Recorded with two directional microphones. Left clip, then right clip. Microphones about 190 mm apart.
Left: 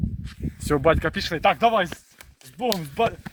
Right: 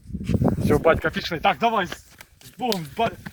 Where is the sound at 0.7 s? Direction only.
5° left (ahead or behind).